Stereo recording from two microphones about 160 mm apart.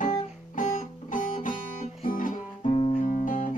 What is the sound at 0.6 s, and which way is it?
Music, 55° left (ahead or behind).